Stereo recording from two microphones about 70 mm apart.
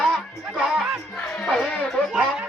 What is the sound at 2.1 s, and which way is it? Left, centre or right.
Speech, centre.